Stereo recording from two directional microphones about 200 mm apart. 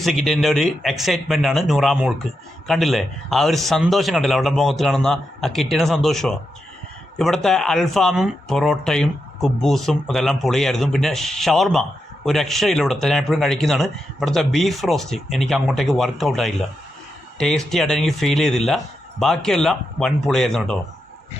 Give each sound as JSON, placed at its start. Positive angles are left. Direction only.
{"t": 0.0, "sound": "speech", "side_deg": 0}